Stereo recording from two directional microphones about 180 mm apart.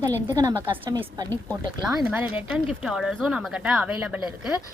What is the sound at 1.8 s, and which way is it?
Speech, 5° right (ahead or behind).